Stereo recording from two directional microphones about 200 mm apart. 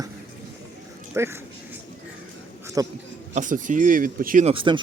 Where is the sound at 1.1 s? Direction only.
10° right (ahead or behind).